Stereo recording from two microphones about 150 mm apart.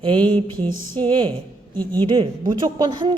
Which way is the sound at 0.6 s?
10° left (ahead or behind).